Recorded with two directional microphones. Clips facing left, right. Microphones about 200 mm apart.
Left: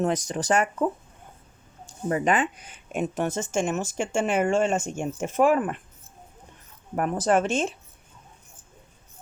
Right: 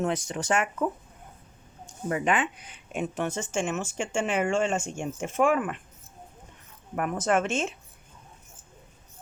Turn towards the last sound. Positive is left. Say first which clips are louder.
# left 3 dB
turn(degrees=35)  # may be behind; listen again after turning